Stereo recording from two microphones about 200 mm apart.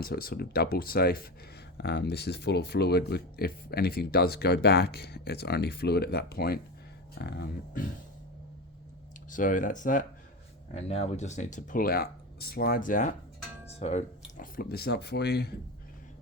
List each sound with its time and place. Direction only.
0.0 s speech: 50° left (ahead or behind)
9.3 s speech: 40° left (ahead or behind)
10.8 s speech: 30° left (ahead or behind)
13.7 s music: 30° left (ahead or behind)
14.3 s speech: 45° left (ahead or behind)